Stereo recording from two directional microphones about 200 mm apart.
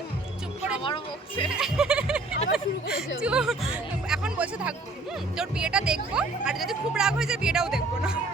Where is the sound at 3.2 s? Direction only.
5° right (ahead or behind).